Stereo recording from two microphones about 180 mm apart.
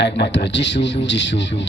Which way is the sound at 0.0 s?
75° left (ahead or behind).